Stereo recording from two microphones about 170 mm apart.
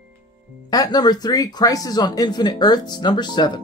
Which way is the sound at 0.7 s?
25° left (ahead or behind).